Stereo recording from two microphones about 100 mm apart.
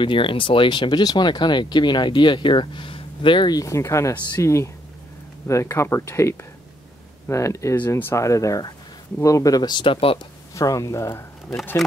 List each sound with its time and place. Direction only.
0.0 s speech: 60° left (ahead or behind)
10.5 s speech: 35° left (ahead or behind)